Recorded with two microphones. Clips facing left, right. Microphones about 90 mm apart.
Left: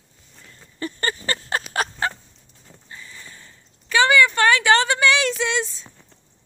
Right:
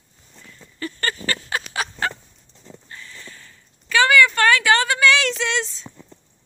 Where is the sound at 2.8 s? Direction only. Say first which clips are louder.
Left 1 dB; 20° left (ahead or behind).